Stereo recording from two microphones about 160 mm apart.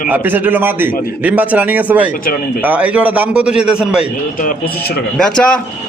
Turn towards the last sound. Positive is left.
turn(degrees=5)  # may be behind; listen again after turning